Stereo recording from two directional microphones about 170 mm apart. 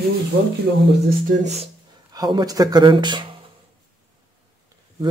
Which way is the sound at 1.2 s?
40° right (ahead or behind).